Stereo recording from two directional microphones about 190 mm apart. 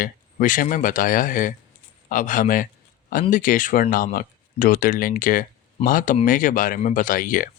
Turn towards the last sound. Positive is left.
turn(degrees=45)  # may be behind; listen again after turning